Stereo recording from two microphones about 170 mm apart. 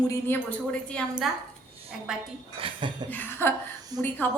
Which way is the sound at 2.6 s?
30° right (ahead or behind).